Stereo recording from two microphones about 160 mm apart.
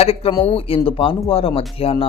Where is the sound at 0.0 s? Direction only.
40° left (ahead or behind).